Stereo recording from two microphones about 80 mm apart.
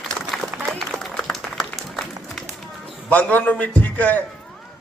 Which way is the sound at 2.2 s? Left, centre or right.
Centre.